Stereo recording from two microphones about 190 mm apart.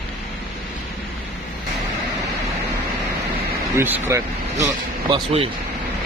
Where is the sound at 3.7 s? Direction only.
10° right (ahead or behind); by 5.5 s 30° right (ahead or behind).